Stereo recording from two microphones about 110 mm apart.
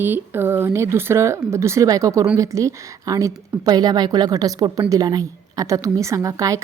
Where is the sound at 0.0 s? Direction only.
20° right (ahead or behind).